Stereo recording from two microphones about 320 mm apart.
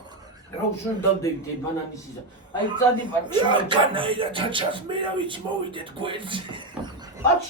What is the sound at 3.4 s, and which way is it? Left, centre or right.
Speech, centre.